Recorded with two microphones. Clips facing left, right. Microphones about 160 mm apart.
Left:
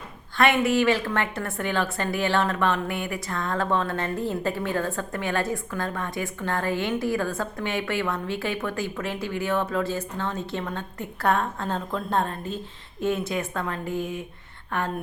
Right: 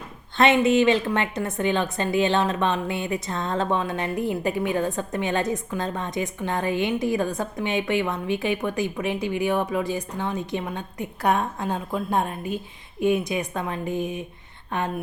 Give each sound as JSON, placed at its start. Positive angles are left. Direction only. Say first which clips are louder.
{"t": 0.3, "sound": "a woman's voice", "louder": "right 3 dB", "side_deg": -20}